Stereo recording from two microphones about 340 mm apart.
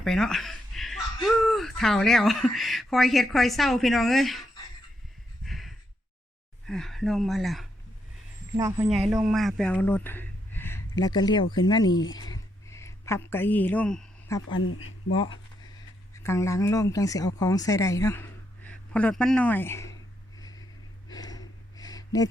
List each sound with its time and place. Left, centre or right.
0.0 s speech: centre
5.5 s sigh: centre
6.7 s speech: centre
12.3 s a sound: centre
14.6 s speech: left
15.1 s speech: centre
20.4 s a sound: centre